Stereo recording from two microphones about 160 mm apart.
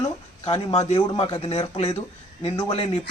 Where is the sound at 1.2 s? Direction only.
30° left (ahead or behind).